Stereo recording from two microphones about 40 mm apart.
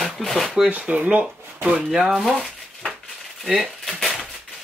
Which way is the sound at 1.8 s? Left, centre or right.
Centre.